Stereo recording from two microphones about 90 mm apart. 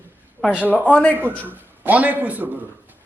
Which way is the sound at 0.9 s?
15° left (ahead or behind).